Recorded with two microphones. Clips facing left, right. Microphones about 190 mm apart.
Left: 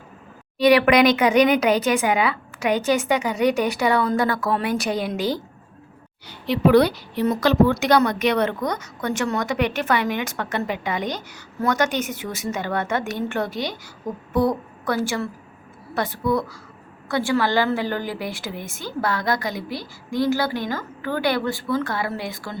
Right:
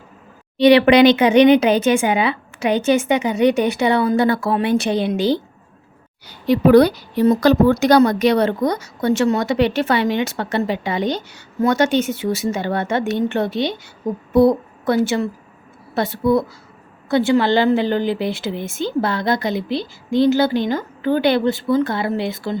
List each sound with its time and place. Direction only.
0.6 s speech: 30° right (ahead or behind)
6.5 s a woman's voice: 45° right (ahead or behind); by 22.5 s 25° right (ahead or behind)